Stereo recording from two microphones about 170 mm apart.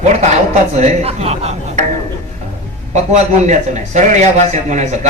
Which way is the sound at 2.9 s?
45° right (ahead or behind).